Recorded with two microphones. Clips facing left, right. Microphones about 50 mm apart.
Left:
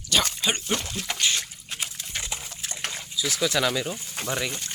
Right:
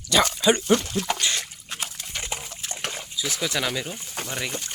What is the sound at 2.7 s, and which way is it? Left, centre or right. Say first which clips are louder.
Bathtub: right 2 dB; right.